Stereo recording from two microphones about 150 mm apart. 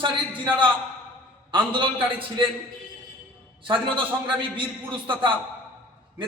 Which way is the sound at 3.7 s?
35° right (ahead or behind).